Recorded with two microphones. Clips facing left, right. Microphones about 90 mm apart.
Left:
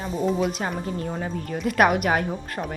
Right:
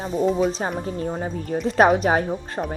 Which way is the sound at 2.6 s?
15° right (ahead or behind).